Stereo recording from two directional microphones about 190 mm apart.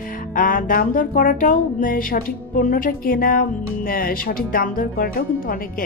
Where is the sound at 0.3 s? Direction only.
45° left (ahead or behind).